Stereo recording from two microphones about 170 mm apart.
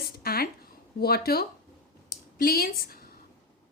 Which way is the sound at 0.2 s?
65° left (ahead or behind).